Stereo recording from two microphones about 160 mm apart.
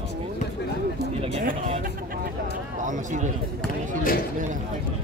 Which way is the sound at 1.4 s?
50° right (ahead or behind).